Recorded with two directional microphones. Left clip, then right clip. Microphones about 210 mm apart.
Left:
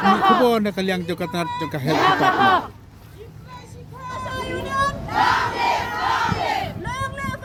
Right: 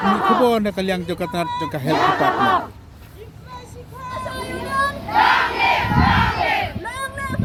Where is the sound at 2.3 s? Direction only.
50° left (ahead or behind).